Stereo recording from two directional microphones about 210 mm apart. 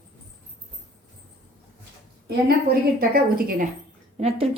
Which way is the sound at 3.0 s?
40° right (ahead or behind).